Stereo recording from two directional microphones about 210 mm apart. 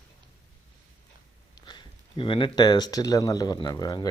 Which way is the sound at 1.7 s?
25° left (ahead or behind).